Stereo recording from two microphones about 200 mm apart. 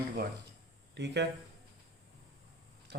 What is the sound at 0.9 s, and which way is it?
Speech, 60° right (ahead or behind).